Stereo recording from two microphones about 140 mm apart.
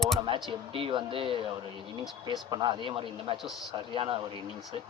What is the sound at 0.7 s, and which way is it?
A man's voice, 40° right (ahead or behind).